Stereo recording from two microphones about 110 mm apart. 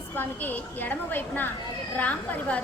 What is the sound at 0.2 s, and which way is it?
A woman's voice, 15° left (ahead or behind).